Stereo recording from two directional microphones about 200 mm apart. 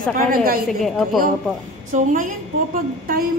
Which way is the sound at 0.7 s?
Centre (ahead or behind).